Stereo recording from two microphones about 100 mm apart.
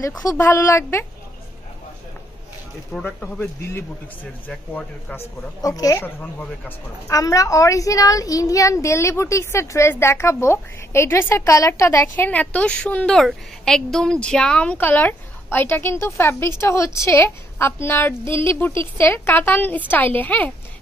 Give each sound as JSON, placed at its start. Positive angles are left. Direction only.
{"t": 0.0, "sound": "a woman's voice", "side_deg": 35}
{"t": 2.9, "sound": "speech", "side_deg": 10}
{"t": 3.6, "sound": "a woman's voice", "side_deg": 25}
{"t": 4.5, "sound": "speech", "side_deg": 10}
{"t": 5.6, "sound": "speech", "side_deg": 35}
{"t": 6.0, "sound": "speech", "side_deg": 15}
{"t": 7.1, "sound": "a woman's voice", "side_deg": 35}
{"t": 12.3, "sound": "a woman's voice", "side_deg": 15}